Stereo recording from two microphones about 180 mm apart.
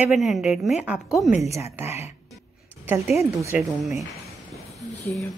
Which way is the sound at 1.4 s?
15° right (ahead or behind).